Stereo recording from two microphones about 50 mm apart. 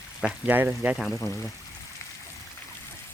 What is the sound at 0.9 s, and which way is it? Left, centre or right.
Speech, centre.